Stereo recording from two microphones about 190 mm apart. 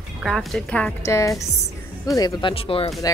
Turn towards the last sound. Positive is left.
turn(degrees=30)  # may be behind; listen again after turning